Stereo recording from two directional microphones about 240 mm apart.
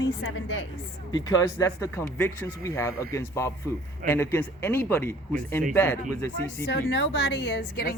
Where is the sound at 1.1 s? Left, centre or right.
Centre.